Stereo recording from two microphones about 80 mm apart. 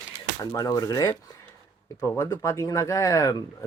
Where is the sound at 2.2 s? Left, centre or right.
Left.